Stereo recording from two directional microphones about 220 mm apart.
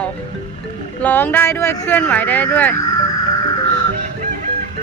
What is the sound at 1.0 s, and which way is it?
Speech, 10° left (ahead or behind).